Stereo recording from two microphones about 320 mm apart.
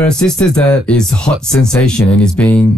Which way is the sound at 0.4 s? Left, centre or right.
Centre.